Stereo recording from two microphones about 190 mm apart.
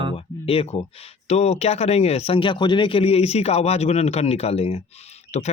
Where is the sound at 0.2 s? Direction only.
30° left (ahead or behind).